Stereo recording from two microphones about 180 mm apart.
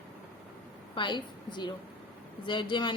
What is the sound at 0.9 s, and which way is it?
A woman's voice, 25° left (ahead or behind).